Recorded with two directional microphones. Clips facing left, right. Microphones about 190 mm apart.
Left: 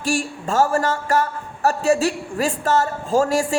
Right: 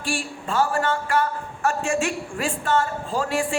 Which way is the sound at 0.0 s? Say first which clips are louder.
Left 6 dB; 45° left (ahead or behind).